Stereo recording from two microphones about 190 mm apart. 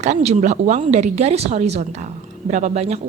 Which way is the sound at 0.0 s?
35° right (ahead or behind).